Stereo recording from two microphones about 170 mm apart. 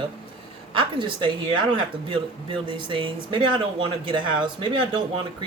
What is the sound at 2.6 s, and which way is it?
Speech, 30° right (ahead or behind).